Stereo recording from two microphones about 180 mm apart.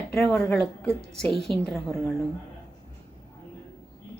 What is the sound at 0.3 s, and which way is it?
A woman's voice, 5° left (ahead or behind).